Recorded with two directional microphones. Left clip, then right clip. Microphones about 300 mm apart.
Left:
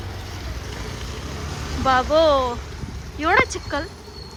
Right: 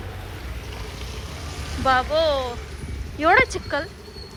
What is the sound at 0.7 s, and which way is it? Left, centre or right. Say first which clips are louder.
Vehicle: left 2 dB; left.